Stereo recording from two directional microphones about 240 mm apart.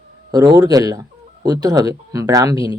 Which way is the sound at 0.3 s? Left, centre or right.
Centre.